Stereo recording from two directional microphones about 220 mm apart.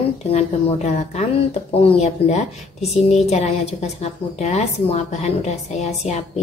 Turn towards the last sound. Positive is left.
turn(degrees=30)  # may be behind; listen again after turning